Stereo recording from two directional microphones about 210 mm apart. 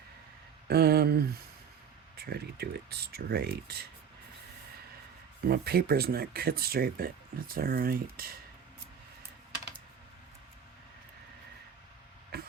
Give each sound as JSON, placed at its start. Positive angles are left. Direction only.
{"t": 0.7, "sound": "speech", "side_deg": -50}
{"t": 5.5, "sound": "speech", "side_deg": -50}
{"t": 12.3, "sound": "a sound", "side_deg": -50}